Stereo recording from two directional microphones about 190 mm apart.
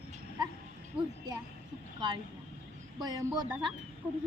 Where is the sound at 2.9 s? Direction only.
20° right (ahead or behind).